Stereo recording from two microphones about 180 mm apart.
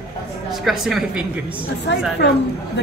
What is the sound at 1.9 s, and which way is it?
Speech, 75° left (ahead or behind).